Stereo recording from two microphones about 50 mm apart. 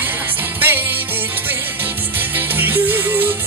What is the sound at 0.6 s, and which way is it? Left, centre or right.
Music, right.